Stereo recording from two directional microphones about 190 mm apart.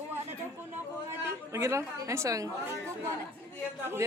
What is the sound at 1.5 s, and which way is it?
A woman's voice, 15° right (ahead or behind).